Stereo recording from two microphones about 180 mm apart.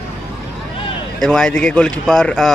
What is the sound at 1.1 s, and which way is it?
Speech, 5° left (ahead or behind).